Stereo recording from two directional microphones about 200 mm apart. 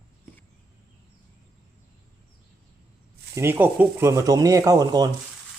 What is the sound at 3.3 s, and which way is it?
Speech, 10° right (ahead or behind).